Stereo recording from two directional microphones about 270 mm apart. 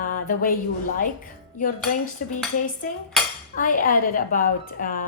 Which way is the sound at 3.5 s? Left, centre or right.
Left.